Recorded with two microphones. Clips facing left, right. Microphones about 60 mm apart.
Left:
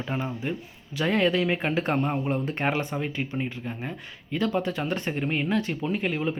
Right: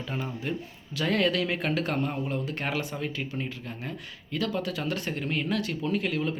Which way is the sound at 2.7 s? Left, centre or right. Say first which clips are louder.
Left 3 dB; centre.